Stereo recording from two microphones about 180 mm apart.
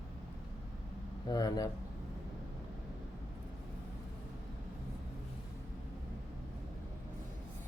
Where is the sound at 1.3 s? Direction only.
20° left (ahead or behind).